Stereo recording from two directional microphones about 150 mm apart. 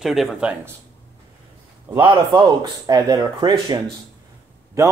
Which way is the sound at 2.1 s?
30° right (ahead or behind).